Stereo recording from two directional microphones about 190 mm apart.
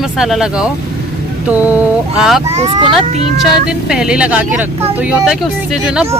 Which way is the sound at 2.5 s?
35° right (ahead or behind).